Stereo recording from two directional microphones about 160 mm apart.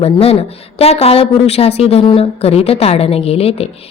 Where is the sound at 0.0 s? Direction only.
40° left (ahead or behind).